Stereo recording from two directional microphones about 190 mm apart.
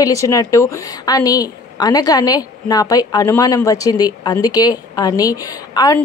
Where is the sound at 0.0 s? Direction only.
15° left (ahead or behind).